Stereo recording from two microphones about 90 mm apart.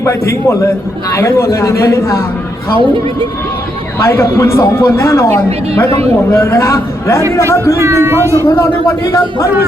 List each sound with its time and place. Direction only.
0.0 s a man's voice: 30° left (ahead or behind)
2.7 s a woman's voice: 75° right (ahead or behind)
4.0 s a man's voice: 35° left (ahead or behind)
7.8 s speech: 30° right (ahead or behind)
8.4 s a man's voice: 30° left (ahead or behind)